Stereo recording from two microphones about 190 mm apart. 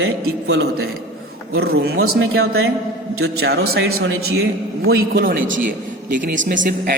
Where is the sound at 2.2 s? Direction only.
90° right.